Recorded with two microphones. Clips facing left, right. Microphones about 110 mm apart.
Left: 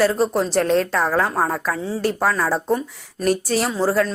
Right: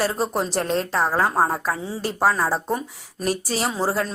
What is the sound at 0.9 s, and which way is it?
Speech, 25° right (ahead or behind).